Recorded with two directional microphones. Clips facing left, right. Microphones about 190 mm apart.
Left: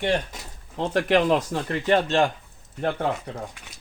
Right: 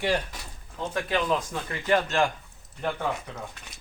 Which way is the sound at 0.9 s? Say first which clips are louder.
Left 7 dB; 80° left.